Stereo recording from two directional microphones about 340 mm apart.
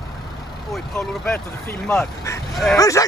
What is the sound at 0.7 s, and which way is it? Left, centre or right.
Speech, centre.